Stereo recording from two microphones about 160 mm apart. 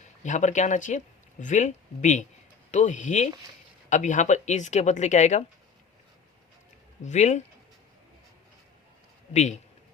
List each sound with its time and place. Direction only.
0.2 s speech: 50° left (ahead or behind)
7.0 s speech: 45° left (ahead or behind)
9.3 s speech: 45° left (ahead or behind)